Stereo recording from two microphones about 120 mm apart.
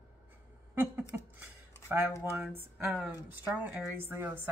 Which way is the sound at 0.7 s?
15° right (ahead or behind).